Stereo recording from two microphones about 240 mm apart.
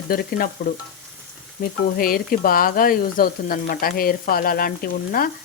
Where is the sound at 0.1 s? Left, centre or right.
Left.